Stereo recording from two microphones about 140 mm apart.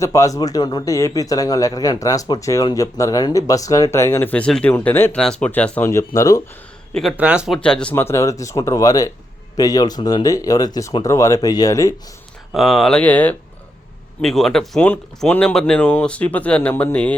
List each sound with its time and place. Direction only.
0.0 s speech: 25° left (ahead or behind)
7.2 s speech: 10° right (ahead or behind)
7.6 s speech: 5° left (ahead or behind); by 11.9 s 25° left (ahead or behind)
12.5 s speech: centre (ahead or behind)